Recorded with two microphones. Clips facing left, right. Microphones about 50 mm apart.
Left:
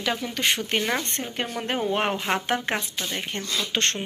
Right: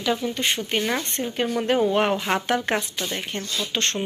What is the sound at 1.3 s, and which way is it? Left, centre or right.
Speech, left.